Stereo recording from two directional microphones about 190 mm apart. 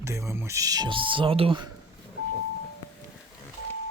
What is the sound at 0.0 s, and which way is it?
Speech, 15° right (ahead or behind).